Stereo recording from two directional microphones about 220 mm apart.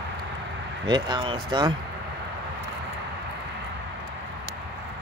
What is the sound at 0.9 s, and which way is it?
Speech, 20° right (ahead or behind).